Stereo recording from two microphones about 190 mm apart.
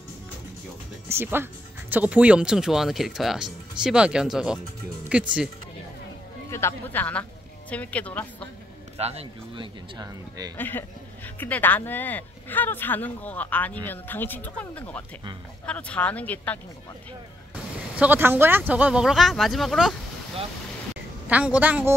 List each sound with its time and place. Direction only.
1.0 s a woman's voice: 10° right (ahead or behind)
6.5 s speech: 10° left (ahead or behind)
8.9 s a man's voice: 35° right (ahead or behind)
9.9 s speech: 20° right (ahead or behind)
10.6 s speech: 10° left (ahead or behind)
17.9 s speech: 10° right (ahead or behind)
21.3 s a woman's voice: 5° right (ahead or behind)